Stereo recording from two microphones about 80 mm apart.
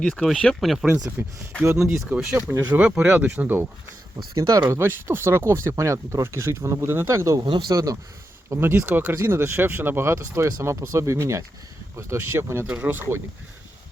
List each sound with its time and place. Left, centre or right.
0.0 s speech: centre
1.2 s speech: right
1.7 s speech: centre
4.4 s speech: right
4.7 s speech: right
8.4 s speech: right
9.1 s speech: right